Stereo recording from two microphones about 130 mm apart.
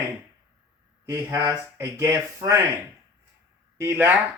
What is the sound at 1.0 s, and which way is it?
Speech, 25° right (ahead or behind).